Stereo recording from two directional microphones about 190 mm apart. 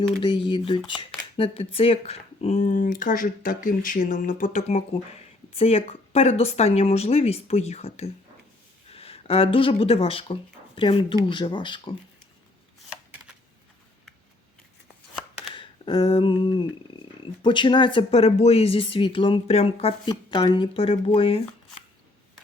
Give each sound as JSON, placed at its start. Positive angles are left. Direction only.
{"t": 0.0, "sound": "speech", "side_deg": 25}
{"t": 15.5, "sound": "speech", "side_deg": 25}